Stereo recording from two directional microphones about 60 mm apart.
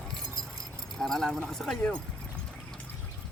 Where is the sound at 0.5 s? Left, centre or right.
Centre.